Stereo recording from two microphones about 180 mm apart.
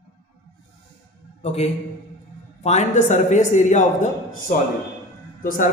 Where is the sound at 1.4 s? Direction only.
35° left (ahead or behind).